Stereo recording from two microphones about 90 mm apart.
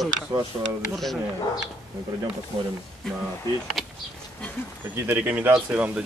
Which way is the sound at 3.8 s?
5° left (ahead or behind).